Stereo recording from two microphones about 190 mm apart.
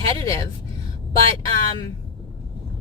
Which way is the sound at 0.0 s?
20° left (ahead or behind).